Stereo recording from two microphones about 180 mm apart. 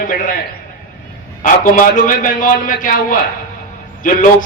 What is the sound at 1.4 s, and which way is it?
A man's voice, 50° left (ahead or behind).